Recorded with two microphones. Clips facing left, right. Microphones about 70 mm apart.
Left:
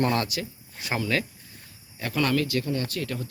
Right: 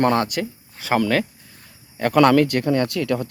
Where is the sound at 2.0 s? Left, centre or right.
Right.